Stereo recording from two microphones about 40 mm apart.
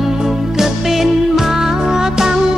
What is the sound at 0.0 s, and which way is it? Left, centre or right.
Music, centre.